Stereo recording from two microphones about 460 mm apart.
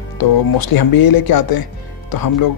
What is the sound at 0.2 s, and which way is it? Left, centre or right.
Speech, left.